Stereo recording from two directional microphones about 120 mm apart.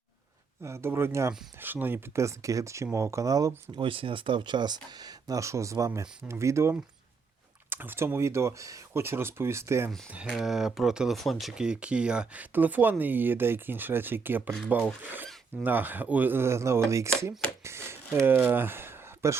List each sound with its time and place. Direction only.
0.6 s speech: 20° right (ahead or behind)
3.8 s speech: 45° right (ahead or behind); by 9.9 s 20° right (ahead or behind)
10.2 s speech: centre (ahead or behind); by 19.4 s 20° right (ahead or behind)